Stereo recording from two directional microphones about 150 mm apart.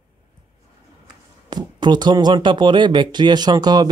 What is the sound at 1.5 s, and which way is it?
Speech, 30° right (ahead or behind).